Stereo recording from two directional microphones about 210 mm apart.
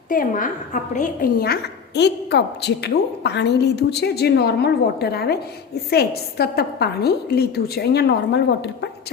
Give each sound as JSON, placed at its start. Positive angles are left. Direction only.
{"t": 0.1, "sound": "a woman's voice", "side_deg": 40}